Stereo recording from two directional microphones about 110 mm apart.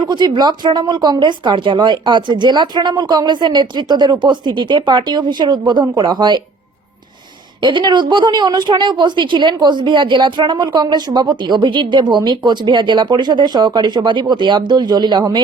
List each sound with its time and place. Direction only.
0.0 s a woman's voice: 40° right (ahead or behind)
7.6 s a woman's voice: 45° right (ahead or behind)